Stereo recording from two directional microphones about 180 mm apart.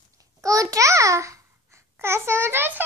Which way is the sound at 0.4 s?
20° right (ahead or behind).